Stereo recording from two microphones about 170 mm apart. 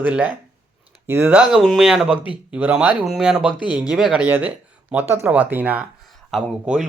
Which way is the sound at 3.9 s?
5° right (ahead or behind).